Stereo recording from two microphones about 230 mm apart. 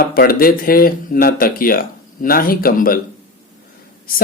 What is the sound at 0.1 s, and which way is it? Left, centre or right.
Speech, left.